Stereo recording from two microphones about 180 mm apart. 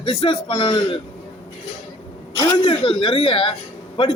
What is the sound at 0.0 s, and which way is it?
Speech, 30° left (ahead or behind).